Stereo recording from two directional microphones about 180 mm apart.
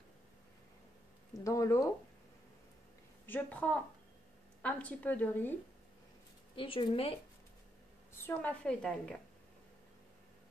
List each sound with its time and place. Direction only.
1.4 s a woman's voice: 15° left (ahead or behind)
3.3 s a woman's voice: 10° left (ahead or behind)
6.5 s speech: 30° left (ahead or behind)
8.1 s a woman's voice: 10° left (ahead or behind)